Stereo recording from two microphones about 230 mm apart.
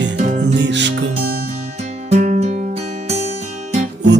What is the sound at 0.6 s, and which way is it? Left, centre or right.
Music, right.